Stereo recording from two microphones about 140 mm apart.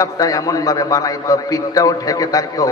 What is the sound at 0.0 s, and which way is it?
A man's voice, 25° left (ahead or behind).